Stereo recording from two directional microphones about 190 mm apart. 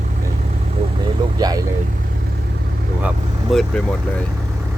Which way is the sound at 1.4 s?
20° right (ahead or behind).